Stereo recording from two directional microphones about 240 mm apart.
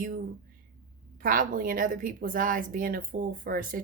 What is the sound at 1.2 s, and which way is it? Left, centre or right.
A woman's voice, right.